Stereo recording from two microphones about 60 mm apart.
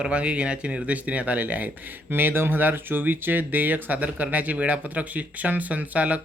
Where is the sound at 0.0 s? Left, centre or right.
Centre.